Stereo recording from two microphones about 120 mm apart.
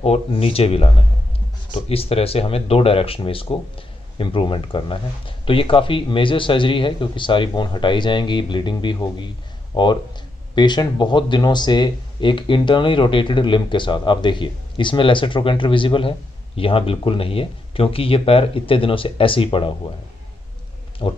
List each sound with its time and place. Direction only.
0.0 s speech: 55° left (ahead or behind)
21.0 s speech: 40° left (ahead or behind)